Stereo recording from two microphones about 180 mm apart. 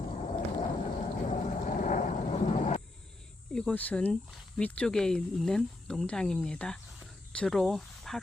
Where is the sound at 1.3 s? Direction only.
45° left (ahead or behind).